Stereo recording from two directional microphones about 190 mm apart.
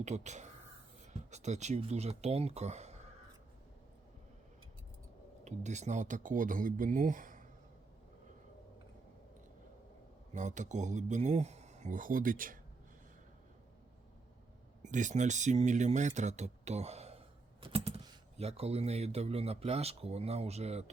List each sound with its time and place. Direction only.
0.0 s speech: 35° right (ahead or behind)
5.5 s speech: 40° right (ahead or behind)
10.3 s speech: 40° right (ahead or behind)
14.8 s speech: 40° right (ahead or behind)
17.6 s typing: 30° right (ahead or behind)
18.3 s speech: 35° right (ahead or behind)